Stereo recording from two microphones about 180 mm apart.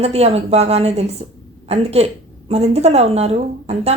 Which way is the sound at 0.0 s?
35° right (ahead or behind).